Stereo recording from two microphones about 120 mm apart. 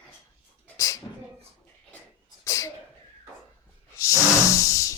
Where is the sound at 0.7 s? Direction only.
25° left (ahead or behind).